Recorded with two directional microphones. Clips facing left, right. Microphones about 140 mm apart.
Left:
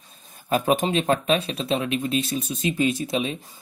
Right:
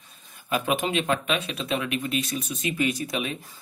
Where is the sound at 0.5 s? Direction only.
40° left (ahead or behind).